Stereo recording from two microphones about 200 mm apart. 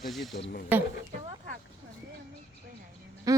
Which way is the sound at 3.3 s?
15° right (ahead or behind).